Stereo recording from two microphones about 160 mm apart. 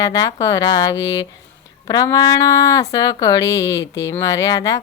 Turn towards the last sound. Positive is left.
turn(degrees=20)  # may be behind; listen again after turning